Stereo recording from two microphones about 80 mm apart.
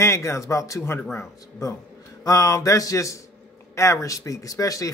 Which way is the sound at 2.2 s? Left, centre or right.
Left.